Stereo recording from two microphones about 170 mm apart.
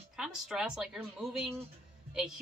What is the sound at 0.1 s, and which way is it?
Speech, 5° right (ahead or behind).